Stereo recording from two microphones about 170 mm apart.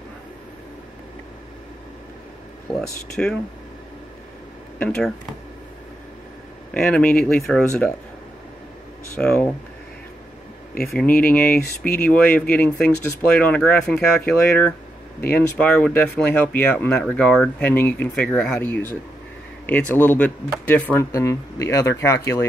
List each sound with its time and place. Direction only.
2.7 s speech: 5° left (ahead or behind)
4.7 s speech: 5° left (ahead or behind)
6.7 s speech: 5° left (ahead or behind)
9.1 s speech: 5° left (ahead or behind)
10.9 s speech: 5° left (ahead or behind)
11.5 s speech: 60° left (ahead or behind)
12.0 s speech: 10° left (ahead or behind)